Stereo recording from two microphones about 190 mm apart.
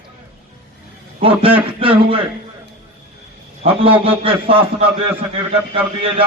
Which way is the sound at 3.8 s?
30° right (ahead or behind).